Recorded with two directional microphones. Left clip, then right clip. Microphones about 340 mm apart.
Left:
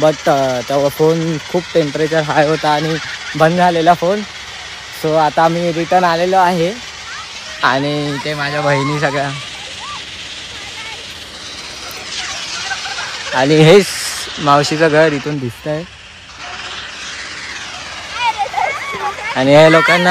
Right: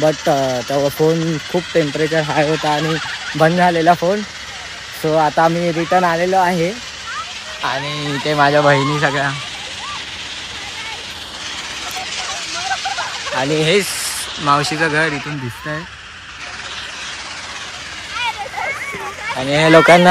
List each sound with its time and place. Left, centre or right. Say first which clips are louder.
0.0 s speech: left 3 dB; centre
2.9 s fowl: even; centre
5.0 s speech: left 2 dB; centre
8.1 s fowl: right 5 dB; centre
12.5 s fowl: right 3 dB; centre
14.4 s speech: left 4 dB; centre
18.1 s a sound: left 6 dB; centre